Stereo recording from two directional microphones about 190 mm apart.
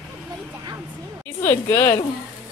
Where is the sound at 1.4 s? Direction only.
10° left (ahead or behind).